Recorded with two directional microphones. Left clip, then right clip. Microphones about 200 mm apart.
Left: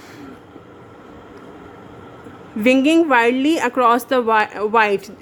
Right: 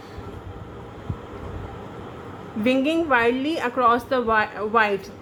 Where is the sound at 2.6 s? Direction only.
50° left (ahead or behind).